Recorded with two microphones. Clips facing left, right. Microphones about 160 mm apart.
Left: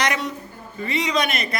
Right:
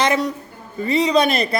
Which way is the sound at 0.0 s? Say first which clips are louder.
Right 5 dB; 30° right (ahead or behind).